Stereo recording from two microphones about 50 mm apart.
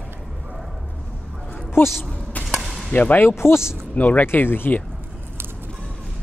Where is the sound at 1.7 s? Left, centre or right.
Left.